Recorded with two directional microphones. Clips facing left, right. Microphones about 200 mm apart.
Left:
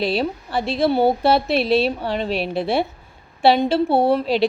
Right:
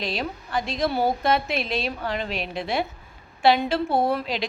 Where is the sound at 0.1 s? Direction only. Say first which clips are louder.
Left 6 dB; 30° left (ahead or behind).